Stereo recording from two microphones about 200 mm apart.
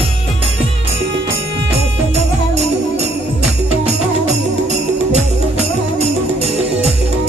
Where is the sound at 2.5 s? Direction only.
35° right (ahead or behind).